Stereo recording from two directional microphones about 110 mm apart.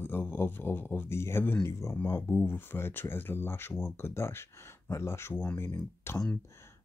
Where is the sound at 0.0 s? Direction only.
20° left (ahead or behind).